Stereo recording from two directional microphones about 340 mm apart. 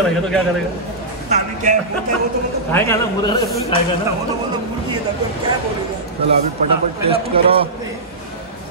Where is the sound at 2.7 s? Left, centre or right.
Centre.